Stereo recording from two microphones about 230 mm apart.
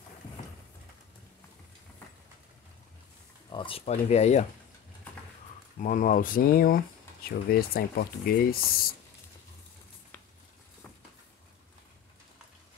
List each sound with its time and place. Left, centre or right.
3.5 s speech: left
5.8 s speech: left